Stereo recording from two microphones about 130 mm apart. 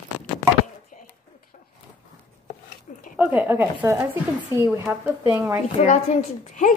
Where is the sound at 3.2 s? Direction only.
15° right (ahead or behind).